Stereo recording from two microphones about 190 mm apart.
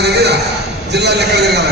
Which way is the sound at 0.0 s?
60° right (ahead or behind).